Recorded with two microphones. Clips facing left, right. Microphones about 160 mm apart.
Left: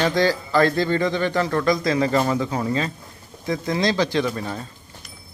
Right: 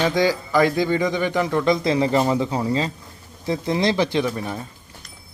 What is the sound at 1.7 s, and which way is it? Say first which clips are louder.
Speech: right 1 dB; 25° right (ahead or behind).